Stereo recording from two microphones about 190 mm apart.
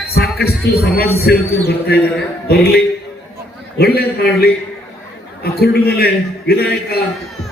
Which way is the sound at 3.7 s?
55° left (ahead or behind).